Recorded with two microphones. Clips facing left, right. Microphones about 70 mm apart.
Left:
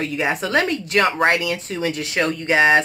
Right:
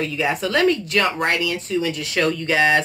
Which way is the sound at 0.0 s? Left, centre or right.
Left.